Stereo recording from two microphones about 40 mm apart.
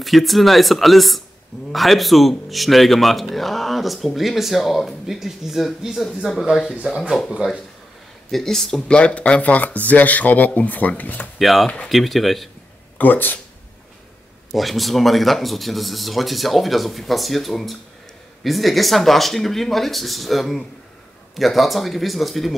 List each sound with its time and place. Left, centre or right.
0.0 s speech: centre
7.0 s speech: centre
8.3 s speech: centre
8.8 s speech: left
11.3 s speech: centre
12.9 s speech: left
14.5 s speech: centre